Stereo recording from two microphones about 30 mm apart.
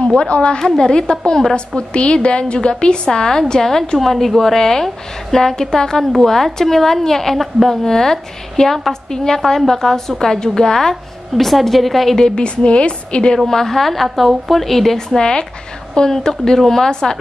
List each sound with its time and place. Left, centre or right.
0.2 s a woman's voice: left
3.1 s a woman's voice: left
4.0 s a woman's voice: centre
6.2 s a woman's voice: centre
7.3 s a woman's voice: centre
7.8 s a woman's voice: centre
11.3 s a woman's voice: centre
12.4 s a woman's voice: left
13.5 s a woman's voice: centre
15.0 s a woman's voice: left